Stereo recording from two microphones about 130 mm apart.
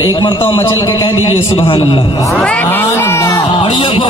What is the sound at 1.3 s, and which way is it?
Mantra, 45° left (ahead or behind).